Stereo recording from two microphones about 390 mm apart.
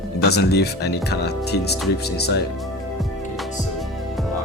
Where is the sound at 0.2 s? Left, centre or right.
Left.